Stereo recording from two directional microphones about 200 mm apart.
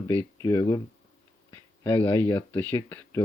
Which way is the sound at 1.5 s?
20° left (ahead or behind).